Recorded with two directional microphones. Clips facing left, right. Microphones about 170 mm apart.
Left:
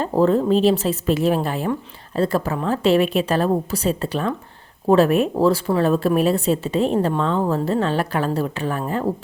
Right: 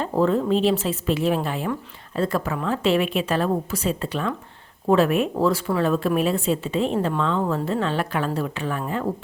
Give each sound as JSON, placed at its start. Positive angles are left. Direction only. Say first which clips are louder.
{"t": 0.0, "sound": "a woman's voice", "louder": "left 3 dB", "side_deg": 35}